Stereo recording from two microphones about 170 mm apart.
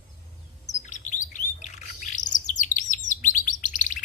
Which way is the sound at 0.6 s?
45° left (ahead or behind).